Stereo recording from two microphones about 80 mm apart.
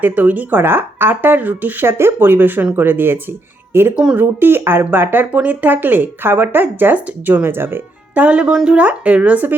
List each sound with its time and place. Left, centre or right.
0.0 s speech: right
3.9 s speech: centre
4.2 s speech: right